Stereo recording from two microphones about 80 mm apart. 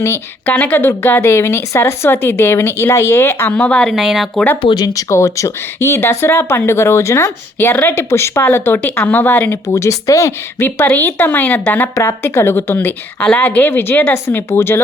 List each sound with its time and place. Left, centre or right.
0.4 s speech: left
3.5 s a woman's voice: centre
3.8 s speech: centre
4.6 s speech: left
4.9 s speech: left